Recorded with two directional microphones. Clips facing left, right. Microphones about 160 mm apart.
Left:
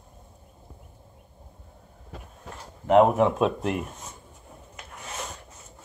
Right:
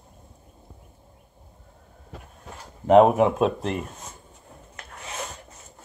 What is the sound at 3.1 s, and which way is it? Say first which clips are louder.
Speech: right 2 dB; 5° right (ahead or behind).